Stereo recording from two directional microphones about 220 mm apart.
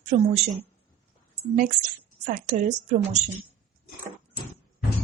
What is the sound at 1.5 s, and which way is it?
A woman's voice, 35° right (ahead or behind).